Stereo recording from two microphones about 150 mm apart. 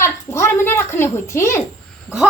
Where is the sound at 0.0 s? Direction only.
15° left (ahead or behind).